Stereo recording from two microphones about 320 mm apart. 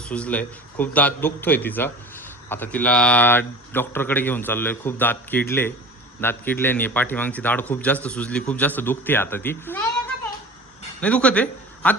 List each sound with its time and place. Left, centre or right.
0.1 s speech: centre
11.0 s speech: centre